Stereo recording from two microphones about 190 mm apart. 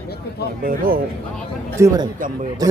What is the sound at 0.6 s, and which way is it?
Speech, 50° right (ahead or behind).